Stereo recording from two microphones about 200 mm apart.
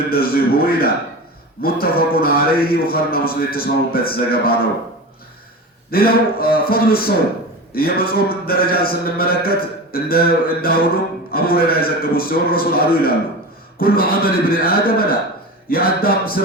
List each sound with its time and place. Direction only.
0.1 s speech: 50° left (ahead or behind)
5.9 s speech: 50° left (ahead or behind)